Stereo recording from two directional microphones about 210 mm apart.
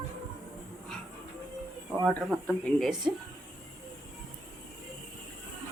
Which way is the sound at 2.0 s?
Centre (ahead or behind).